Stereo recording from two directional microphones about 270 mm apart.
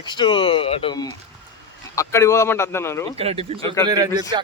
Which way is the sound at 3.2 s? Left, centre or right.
Right.